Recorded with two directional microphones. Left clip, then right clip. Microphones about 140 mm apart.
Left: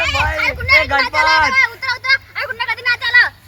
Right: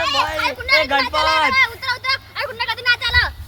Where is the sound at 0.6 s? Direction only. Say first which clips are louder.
Left 3 dB; 25° left (ahead or behind).